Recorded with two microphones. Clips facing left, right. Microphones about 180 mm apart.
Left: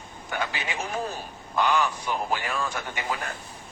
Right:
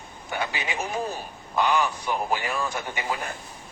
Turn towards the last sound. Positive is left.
turn(degrees=-10)  # may be behind; listen again after turning